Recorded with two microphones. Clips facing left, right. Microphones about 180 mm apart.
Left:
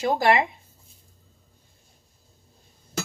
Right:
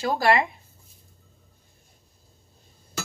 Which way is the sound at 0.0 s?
20° left (ahead or behind).